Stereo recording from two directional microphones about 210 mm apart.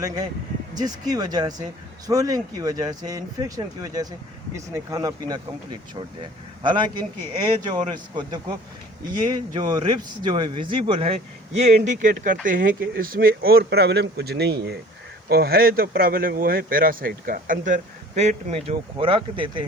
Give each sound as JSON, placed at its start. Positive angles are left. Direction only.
{"t": 0.7, "sound": "speech", "side_deg": -20}
{"t": 6.6, "sound": "speech", "side_deg": -20}